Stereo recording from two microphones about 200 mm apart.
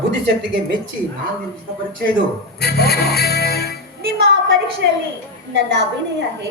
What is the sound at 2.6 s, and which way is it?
Music, 55° left (ahead or behind).